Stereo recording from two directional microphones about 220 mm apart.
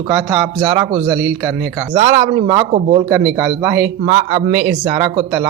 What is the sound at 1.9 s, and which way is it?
A man's voice, 20° right (ahead or behind).